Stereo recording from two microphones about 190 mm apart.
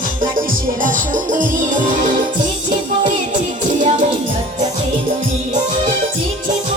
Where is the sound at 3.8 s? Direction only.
40° right (ahead or behind).